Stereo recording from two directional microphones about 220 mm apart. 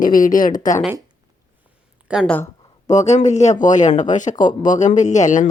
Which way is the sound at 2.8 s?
30° left (ahead or behind).